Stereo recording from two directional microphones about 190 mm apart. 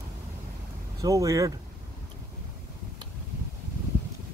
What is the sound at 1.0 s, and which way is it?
Speech, 20° right (ahead or behind).